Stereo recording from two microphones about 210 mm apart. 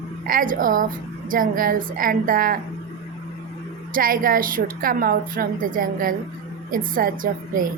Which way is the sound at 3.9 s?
40° right (ahead or behind).